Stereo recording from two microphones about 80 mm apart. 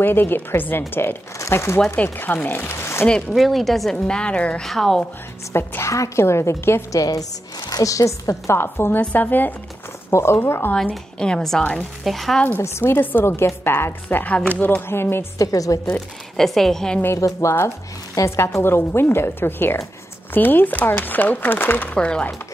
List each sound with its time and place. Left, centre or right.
0.0 s speech: left
3.3 s speech: centre
5.5 s speech: left
7.0 s speech: left
8.5 s speech: left
10.1 s speech: left
10.7 s a woman's voice: centre
12.4 s speech: left
14.0 s speech: centre
15.3 s speech: left
16.3 s speech: centre
17.0 s speech: left; by 22.3 s centre